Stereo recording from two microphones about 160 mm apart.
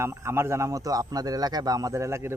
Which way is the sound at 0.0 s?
15° right (ahead or behind).